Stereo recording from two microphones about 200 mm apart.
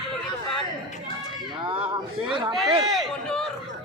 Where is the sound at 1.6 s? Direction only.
25° right (ahead or behind).